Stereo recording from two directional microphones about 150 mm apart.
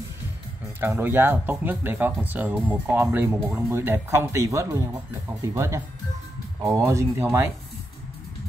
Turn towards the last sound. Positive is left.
turn(degrees=-15)  # may be behind; listen again after turning